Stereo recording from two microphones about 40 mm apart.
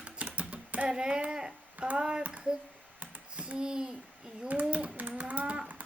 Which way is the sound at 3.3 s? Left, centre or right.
Right.